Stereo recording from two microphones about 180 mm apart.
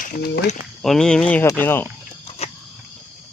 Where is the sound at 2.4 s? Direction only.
35° left (ahead or behind).